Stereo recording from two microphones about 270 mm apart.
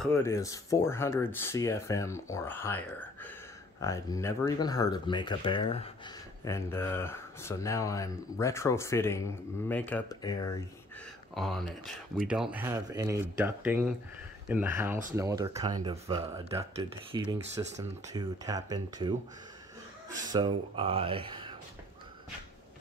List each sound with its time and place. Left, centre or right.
0.0 s speech: centre
11.3 s speech: centre
20.2 s speech: centre